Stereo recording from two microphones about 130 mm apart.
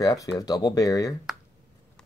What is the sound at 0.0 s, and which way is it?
Speech, 25° left (ahead or behind).